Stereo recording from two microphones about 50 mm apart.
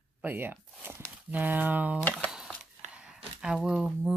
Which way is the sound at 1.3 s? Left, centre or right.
Right.